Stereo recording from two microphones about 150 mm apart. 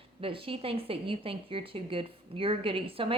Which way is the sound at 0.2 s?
35° right (ahead or behind).